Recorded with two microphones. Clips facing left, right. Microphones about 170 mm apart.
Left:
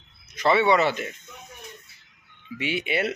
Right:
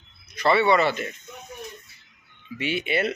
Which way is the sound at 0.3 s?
15° left (ahead or behind).